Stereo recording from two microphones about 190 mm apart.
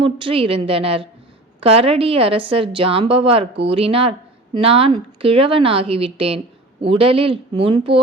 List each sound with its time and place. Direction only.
0.0 s a woman's voice: 25° right (ahead or behind)